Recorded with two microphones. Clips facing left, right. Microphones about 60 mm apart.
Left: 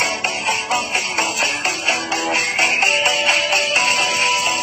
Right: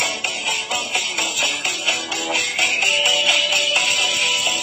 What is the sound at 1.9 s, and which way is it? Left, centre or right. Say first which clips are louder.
Music: left 4 dB; left.